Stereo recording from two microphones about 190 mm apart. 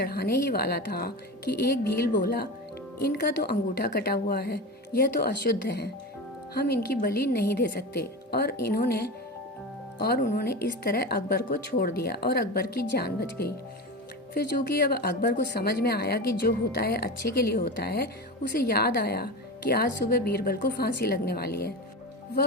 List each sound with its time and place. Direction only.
0.0 s speech: 55° left (ahead or behind)